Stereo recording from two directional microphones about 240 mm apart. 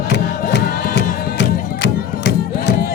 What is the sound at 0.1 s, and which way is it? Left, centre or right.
Music, left.